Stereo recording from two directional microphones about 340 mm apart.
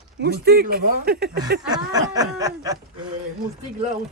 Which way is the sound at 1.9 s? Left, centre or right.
Centre.